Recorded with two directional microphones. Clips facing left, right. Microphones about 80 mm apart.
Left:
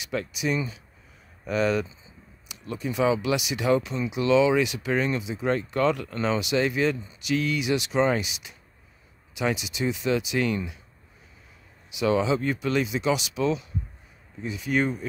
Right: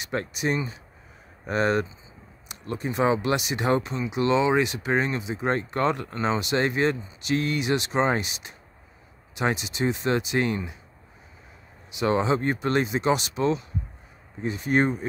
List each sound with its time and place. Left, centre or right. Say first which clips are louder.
0.0 s speech: right 1 dB; right
11.9 s speech: even; right